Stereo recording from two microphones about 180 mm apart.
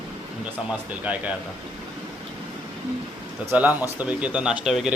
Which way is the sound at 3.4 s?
10° right (ahead or behind).